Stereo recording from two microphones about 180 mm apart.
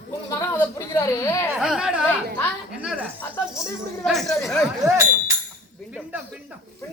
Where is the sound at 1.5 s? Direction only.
5° right (ahead or behind).